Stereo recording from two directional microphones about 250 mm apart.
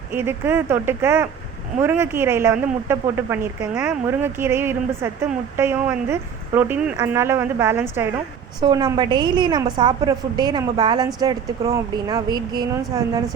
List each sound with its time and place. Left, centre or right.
0.1 s a woman's voice: centre